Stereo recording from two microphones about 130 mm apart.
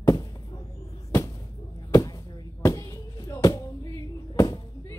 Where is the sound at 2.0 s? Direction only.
30° left (ahead or behind).